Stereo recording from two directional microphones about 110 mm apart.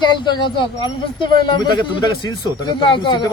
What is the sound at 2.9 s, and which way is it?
Speech, 45° left (ahead or behind).